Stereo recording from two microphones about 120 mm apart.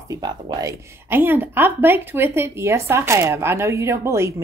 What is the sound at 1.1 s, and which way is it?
A woman's voice, 15° right (ahead or behind).